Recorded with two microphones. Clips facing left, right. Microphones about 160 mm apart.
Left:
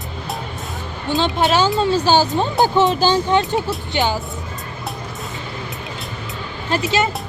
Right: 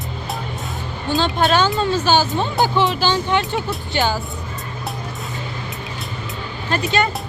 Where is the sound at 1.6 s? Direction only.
10° left (ahead or behind).